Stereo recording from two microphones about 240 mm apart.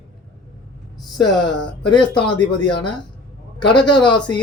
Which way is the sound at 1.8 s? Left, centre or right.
Centre.